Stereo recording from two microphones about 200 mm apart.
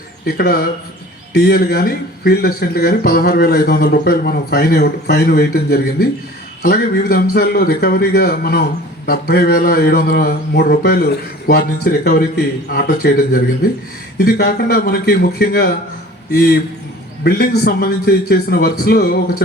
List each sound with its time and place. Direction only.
0.3 s a man's voice: 50° left (ahead or behind)